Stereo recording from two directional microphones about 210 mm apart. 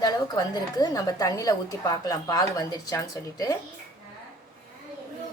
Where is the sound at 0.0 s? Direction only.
20° left (ahead or behind).